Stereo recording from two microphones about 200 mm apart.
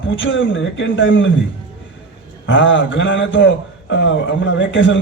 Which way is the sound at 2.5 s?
70° left (ahead or behind).